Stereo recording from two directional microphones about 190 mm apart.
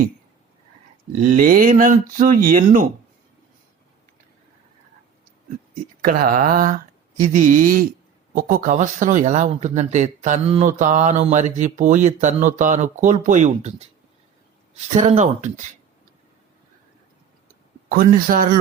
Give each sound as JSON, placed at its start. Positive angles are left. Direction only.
{"t": 1.2, "sound": "speech", "side_deg": -45}
{"t": 6.0, "sound": "speech", "side_deg": -50}
{"t": 17.8, "sound": "speech", "side_deg": -50}